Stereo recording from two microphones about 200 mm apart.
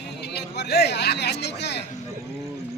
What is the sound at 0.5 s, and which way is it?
Speech, 55° left (ahead or behind).